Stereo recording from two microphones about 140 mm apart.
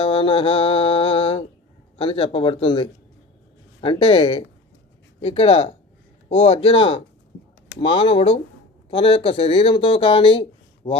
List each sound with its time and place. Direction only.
0.0 s speech: 40° left (ahead or behind)